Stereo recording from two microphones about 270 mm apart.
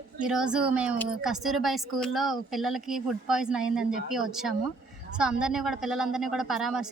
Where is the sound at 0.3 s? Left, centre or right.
Centre.